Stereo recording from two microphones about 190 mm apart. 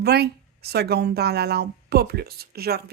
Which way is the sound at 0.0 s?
55° right (ahead or behind).